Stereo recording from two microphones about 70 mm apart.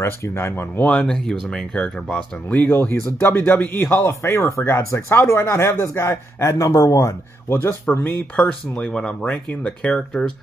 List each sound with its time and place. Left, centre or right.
0.0 s speech: left
0.8 s speech: centre
2.5 s speech: left
4.0 s speech: left; by 10.3 s centre